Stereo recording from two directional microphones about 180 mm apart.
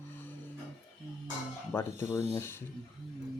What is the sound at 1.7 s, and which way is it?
Speech, 15° left (ahead or behind).